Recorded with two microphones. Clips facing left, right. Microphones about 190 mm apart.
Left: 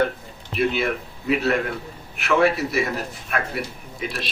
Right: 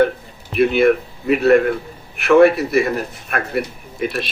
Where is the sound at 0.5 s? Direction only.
55° right (ahead or behind).